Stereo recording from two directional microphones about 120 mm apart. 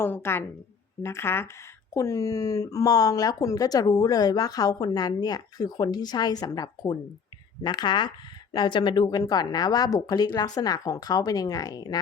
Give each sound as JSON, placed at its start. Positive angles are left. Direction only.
{"t": 0.0, "sound": "a woman's voice", "side_deg": 20}